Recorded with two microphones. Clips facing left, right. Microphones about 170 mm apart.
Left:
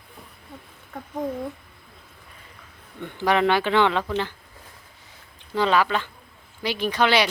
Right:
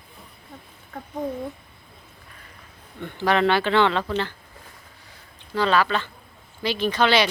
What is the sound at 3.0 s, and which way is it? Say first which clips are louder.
Speech: even; 15° left (ahead or behind).